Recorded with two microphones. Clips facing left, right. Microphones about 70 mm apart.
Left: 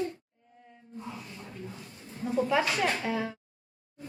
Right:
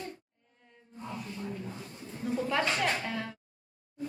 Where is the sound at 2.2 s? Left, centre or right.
Centre.